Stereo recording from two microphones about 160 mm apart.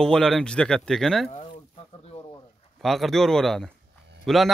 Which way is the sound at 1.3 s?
40° left (ahead or behind).